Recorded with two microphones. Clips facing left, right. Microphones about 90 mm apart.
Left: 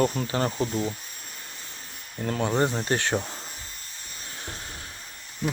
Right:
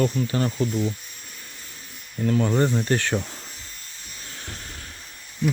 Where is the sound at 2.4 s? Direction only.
20° left (ahead or behind).